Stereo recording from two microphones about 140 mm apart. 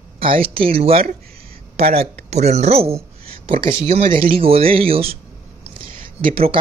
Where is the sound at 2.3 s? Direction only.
50° right (ahead or behind).